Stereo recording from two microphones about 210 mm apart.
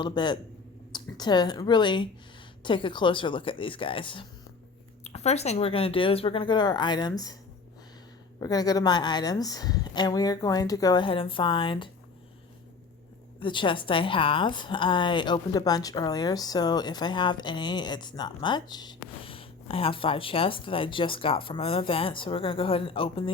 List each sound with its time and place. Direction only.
0.0 s a woman's voice: 20° left (ahead or behind)
8.4 s a woman's voice: 20° left (ahead or behind)
13.4 s a woman's voice: 25° left (ahead or behind)